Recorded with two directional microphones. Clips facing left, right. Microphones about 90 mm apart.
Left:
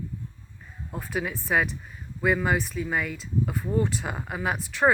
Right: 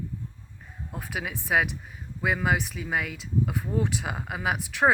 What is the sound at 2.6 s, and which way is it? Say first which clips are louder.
Speech: left 2 dB; 75° right (ahead or behind).